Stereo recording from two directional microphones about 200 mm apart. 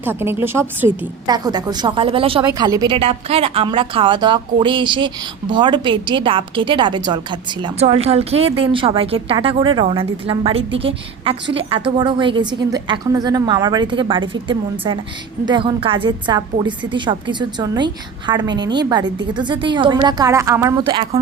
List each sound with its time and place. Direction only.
0.0 s a woman's voice: 10° right (ahead or behind); by 21.2 s 25° right (ahead or behind)